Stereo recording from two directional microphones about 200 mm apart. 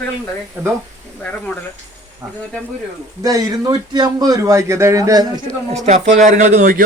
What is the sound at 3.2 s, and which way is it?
A man's voice, 15° right (ahead or behind).